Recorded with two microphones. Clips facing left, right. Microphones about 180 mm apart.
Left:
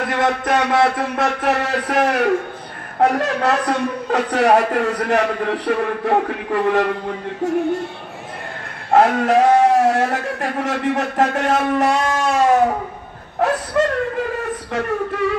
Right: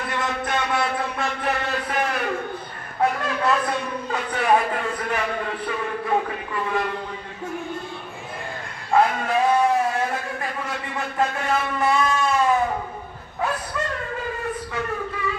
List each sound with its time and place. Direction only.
0.0 s a man's voice: 70° left (ahead or behind)
8.9 s a man's voice: 80° left